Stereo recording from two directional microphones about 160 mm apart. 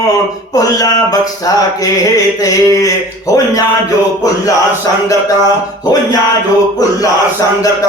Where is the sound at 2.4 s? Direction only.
20° left (ahead or behind).